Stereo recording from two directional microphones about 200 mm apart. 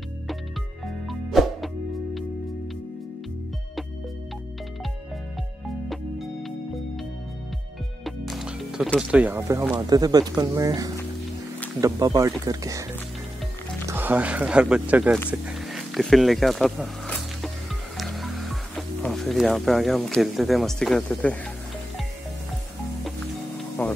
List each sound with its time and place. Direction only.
0.8 s music: centre (ahead or behind)
8.0 s speech: centre (ahead or behind); by 12.8 s 15° right (ahead or behind)
13.8 s speech: 10° right (ahead or behind)
15.4 s a sound: centre (ahead or behind)
17.9 s speech: centre (ahead or behind)
23.8 s a sound: 10° left (ahead or behind)